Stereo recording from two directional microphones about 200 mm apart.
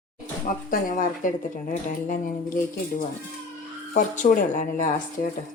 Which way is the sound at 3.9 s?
40° left (ahead or behind).